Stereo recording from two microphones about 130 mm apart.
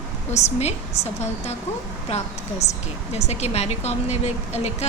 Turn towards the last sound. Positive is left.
turn(degrees=55)  # may be behind; listen again after turning